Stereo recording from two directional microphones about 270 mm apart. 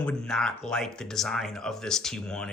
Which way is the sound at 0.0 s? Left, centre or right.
Centre.